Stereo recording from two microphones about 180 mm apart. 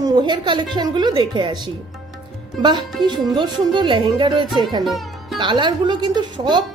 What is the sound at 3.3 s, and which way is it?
Speech, 25° right (ahead or behind).